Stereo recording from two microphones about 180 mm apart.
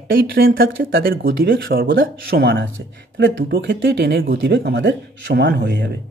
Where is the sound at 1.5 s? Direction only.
90° right.